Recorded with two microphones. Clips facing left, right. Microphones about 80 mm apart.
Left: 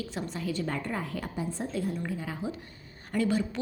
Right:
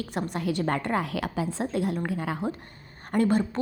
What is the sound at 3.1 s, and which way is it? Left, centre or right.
Speech, right.